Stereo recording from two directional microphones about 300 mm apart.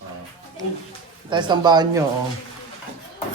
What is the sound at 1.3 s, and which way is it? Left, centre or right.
Speech, centre.